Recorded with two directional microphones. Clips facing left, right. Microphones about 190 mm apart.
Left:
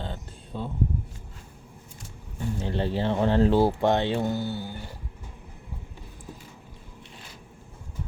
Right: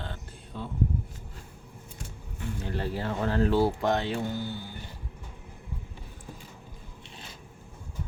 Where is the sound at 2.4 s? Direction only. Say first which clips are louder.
Left 5 dB; 25° left (ahead or behind).